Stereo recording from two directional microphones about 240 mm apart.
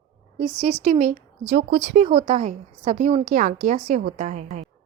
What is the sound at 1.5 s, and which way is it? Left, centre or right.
Speech, right.